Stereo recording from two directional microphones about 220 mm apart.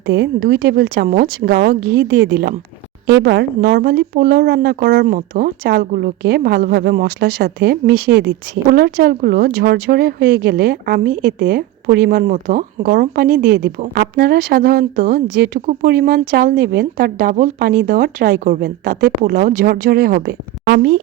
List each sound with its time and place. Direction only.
0.0 s speech: 50° right (ahead or behind)